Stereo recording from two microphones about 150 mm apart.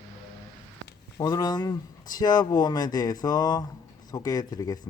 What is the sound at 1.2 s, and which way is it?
Speech, 30° left (ahead or behind).